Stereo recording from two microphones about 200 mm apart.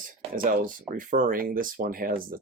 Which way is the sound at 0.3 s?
45° right (ahead or behind).